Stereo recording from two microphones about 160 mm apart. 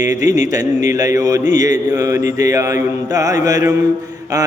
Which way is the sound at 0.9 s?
20° right (ahead or behind).